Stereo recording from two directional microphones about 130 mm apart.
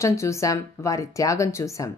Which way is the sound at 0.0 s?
20° left (ahead or behind).